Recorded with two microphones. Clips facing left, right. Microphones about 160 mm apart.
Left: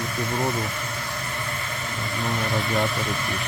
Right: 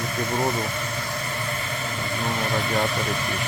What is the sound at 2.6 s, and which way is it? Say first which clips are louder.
Vehicle: left 1 dB; centre (ahead or behind).